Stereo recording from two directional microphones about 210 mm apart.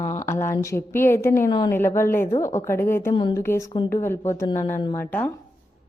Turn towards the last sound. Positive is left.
turn(degrees=5)  # may be behind; listen again after turning